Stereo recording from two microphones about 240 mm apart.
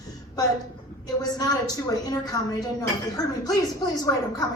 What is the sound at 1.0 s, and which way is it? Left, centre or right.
A woman's voice, centre.